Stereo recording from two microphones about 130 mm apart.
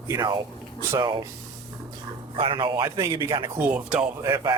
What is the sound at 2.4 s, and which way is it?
Speech, 40° right (ahead or behind).